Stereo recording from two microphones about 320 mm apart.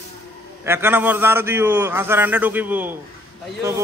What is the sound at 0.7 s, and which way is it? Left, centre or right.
A man's voice, centre.